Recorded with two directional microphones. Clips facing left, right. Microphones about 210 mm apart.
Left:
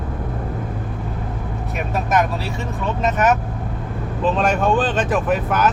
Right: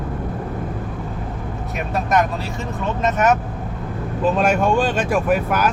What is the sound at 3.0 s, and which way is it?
Speech, centre (ahead or behind).